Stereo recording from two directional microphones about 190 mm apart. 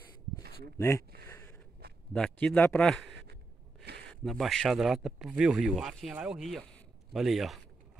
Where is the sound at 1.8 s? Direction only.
60° right (ahead or behind).